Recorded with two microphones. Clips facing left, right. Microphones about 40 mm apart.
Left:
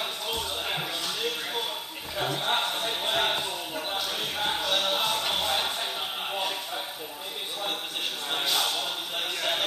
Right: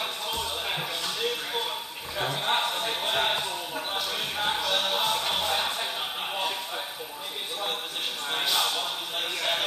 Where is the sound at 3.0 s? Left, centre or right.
Centre.